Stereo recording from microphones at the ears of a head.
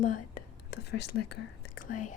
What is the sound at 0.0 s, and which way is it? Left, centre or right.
Speech, left.